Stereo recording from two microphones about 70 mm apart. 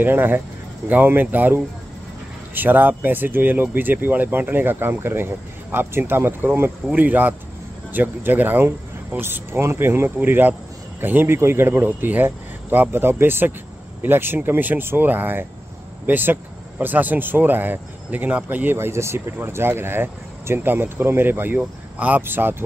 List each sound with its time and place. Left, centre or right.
0.0 s speech: right